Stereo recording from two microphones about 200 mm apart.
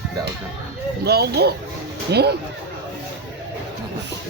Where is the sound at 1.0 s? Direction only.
55° right (ahead or behind).